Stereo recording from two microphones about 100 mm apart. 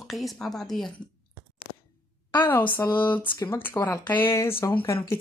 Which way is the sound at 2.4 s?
20° left (ahead or behind).